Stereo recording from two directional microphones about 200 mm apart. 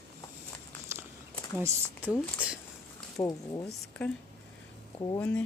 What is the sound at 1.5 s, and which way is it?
A woman's voice, 15° right (ahead or behind).